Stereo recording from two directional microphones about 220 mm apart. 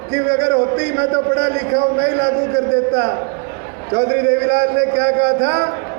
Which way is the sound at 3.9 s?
50° right (ahead or behind).